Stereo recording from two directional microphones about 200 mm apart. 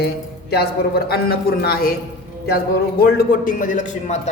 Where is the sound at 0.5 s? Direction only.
50° left (ahead or behind).